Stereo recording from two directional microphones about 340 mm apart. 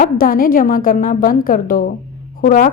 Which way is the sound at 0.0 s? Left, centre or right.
Left.